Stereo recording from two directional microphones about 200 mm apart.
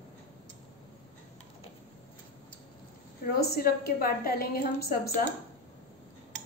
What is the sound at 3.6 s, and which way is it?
A woman's voice, 50° left (ahead or behind).